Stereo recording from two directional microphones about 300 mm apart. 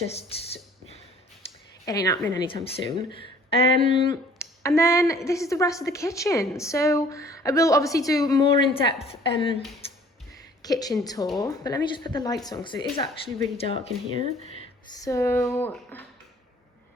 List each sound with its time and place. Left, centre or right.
0.1 s speech: centre
1.4 s speech: centre
10.6 s a woman's voice: centre
15.0 s speech: centre